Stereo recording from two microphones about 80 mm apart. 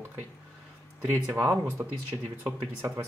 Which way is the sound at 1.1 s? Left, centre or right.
Right.